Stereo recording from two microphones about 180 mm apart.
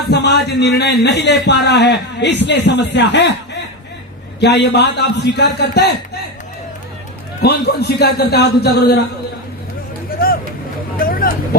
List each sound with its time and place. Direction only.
0.1 s a man's voice: 65° left (ahead or behind)
7.4 s a man's voice: 65° left (ahead or behind)
10.2 s vehicle: 55° left (ahead or behind)